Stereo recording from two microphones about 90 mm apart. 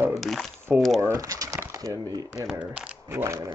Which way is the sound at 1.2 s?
40° right (ahead or behind).